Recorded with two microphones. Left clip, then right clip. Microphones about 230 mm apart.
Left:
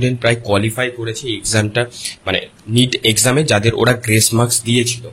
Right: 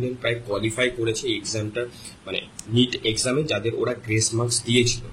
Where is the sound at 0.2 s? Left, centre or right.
Left.